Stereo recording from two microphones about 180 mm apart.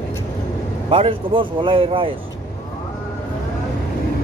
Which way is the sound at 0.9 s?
30° right (ahead or behind).